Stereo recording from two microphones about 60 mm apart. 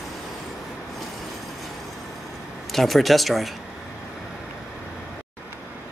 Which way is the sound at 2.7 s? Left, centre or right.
Centre.